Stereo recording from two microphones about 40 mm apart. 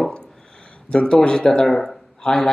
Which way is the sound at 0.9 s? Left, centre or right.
Centre.